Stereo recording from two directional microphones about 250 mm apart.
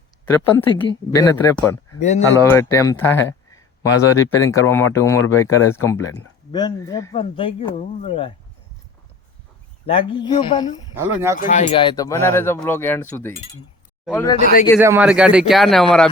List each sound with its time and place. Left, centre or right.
0.3 s speech: centre
2.0 s speech: left
2.3 s speech: centre
9.8 s speech: left
14.8 s a man's voice: centre